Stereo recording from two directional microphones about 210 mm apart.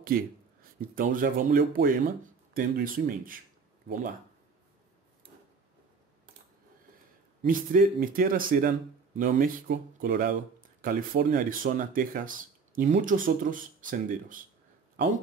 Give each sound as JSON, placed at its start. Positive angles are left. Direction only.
{"t": 0.0, "sound": "speech", "side_deg": -45}
{"t": 7.4, "sound": "speech", "side_deg": -40}